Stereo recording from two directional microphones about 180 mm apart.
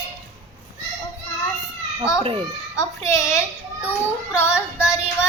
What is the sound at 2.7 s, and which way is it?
Child singing, 15° left (ahead or behind).